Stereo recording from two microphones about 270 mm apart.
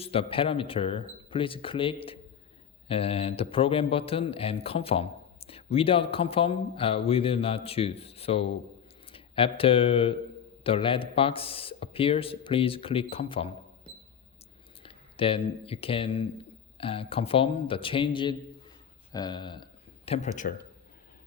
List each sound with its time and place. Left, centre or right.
0.0 s a man's voice: centre
14.8 s a man's voice: centre